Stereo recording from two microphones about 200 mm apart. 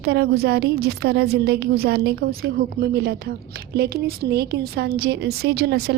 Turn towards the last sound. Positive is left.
turn(degrees=-55)  # may be behind; listen again after turning